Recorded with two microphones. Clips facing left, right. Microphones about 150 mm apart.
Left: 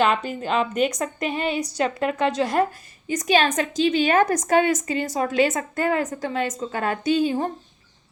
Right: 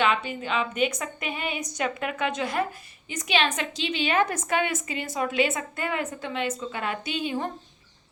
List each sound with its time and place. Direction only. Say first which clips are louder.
0.0 s a woman's voice: left 4 dB; 40° left (ahead or behind)